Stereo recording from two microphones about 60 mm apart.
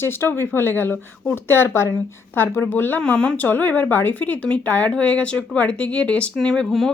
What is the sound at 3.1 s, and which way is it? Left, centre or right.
Speech, left.